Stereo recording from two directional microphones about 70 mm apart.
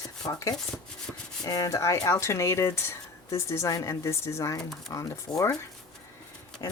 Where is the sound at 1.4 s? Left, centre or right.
Left.